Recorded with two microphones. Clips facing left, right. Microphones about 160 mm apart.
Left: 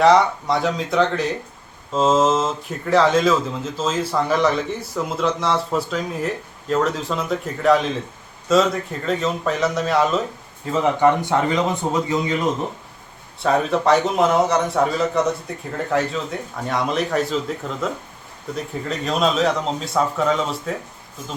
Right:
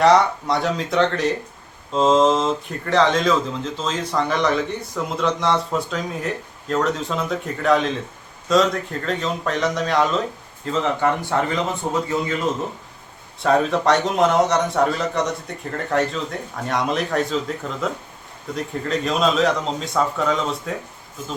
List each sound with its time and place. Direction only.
0.0 s speech: centre (ahead or behind)
10.7 s a man's voice: 20° left (ahead or behind)
13.4 s speech: centre (ahead or behind)